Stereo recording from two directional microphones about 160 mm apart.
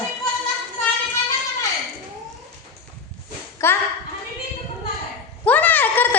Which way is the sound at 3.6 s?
15° left (ahead or behind).